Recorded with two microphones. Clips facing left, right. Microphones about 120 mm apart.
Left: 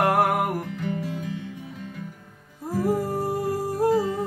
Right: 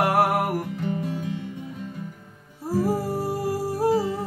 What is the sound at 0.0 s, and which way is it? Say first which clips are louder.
Music: even; 5° right (ahead or behind).